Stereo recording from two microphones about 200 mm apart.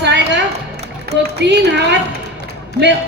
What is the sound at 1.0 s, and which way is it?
Speech, 55° right (ahead or behind).